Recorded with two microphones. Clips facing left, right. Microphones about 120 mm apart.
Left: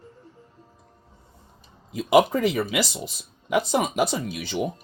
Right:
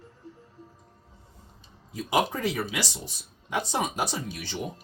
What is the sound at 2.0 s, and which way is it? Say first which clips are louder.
Speech: left 8 dB; 85° left.